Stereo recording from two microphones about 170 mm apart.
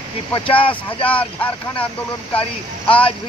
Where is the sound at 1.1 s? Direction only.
10° left (ahead or behind).